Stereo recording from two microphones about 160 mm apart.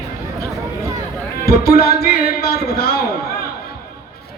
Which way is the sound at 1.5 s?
75° left (ahead or behind).